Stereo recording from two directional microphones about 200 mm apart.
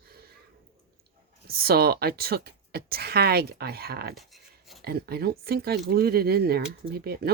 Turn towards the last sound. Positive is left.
turn(degrees=-50)  # may be behind; listen again after turning